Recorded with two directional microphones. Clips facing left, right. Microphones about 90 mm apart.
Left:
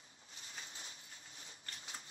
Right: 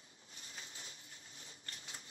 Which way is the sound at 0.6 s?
35° left (ahead or behind).